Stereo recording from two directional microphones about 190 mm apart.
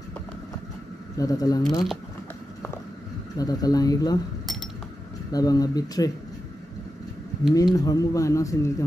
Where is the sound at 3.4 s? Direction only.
20° left (ahead or behind).